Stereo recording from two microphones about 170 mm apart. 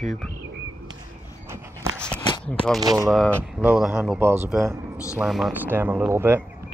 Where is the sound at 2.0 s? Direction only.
5° left (ahead or behind).